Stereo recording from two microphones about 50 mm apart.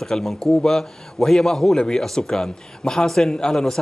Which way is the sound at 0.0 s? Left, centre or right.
Centre.